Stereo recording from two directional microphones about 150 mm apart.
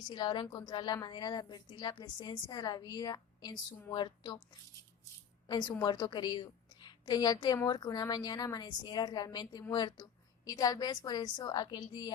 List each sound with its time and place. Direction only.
0.1 s a woman's voice: 30° left (ahead or behind)
5.5 s a woman's voice: 30° left (ahead or behind)